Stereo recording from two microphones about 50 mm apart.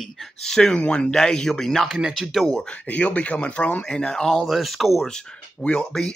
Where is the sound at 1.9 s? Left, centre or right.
Centre.